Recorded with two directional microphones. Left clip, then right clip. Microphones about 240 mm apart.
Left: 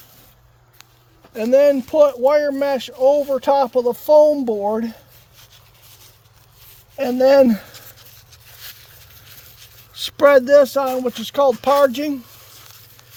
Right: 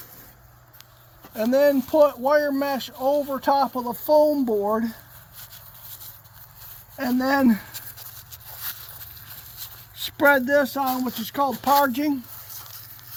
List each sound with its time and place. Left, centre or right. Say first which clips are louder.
1.4 s speech: left 5 dB; left
6.9 s speech: left 10 dB; left
9.9 s speech: left 6 dB; left